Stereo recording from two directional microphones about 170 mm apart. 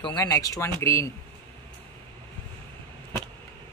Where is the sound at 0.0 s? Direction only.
20° left (ahead or behind).